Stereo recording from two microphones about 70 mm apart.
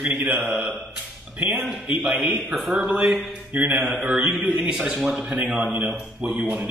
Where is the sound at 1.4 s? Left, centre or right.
Centre.